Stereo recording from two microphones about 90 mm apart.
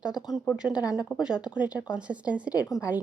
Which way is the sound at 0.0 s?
10° right (ahead or behind).